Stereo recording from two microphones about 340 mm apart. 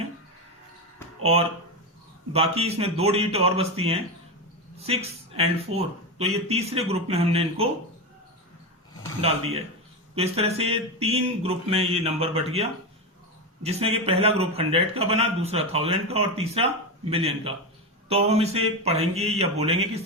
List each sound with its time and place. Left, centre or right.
1.2 s speech: centre
10.2 s speech: centre